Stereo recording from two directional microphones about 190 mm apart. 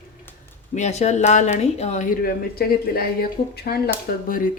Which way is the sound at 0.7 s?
35° left (ahead or behind).